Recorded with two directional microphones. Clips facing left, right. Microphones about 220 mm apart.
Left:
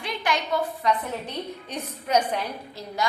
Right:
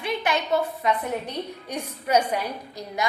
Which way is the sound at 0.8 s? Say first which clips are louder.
Right 1 dB; 15° right (ahead or behind).